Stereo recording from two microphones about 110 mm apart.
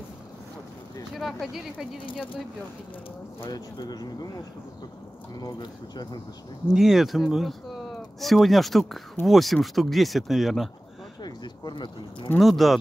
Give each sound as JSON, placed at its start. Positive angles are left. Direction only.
{"t": 1.1, "sound": "speech", "side_deg": 0}
{"t": 3.4, "sound": "speech", "side_deg": 40}
{"t": 5.4, "sound": "speech", "side_deg": 40}
{"t": 6.7, "sound": "speech", "side_deg": 0}
{"t": 11.2, "sound": "speech", "side_deg": 40}
{"t": 12.4, "sound": "speech", "side_deg": 0}